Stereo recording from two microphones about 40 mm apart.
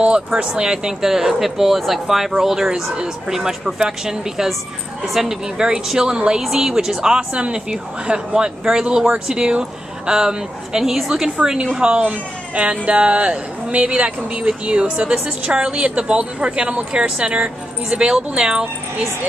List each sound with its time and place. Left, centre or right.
0.4 s speech: right
5.6 s speech: right
8.8 s speech: right
12.0 s speech: right